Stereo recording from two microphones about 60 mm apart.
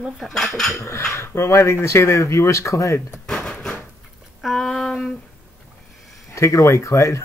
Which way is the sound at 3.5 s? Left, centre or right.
Centre.